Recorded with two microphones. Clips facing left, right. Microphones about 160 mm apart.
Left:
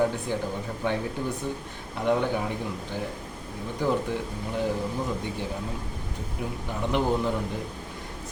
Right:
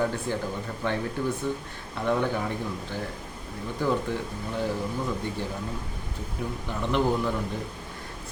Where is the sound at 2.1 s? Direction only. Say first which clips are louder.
Left 1 dB; 15° left (ahead or behind).